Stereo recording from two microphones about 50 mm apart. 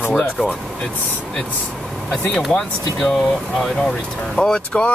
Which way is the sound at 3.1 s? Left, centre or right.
Centre.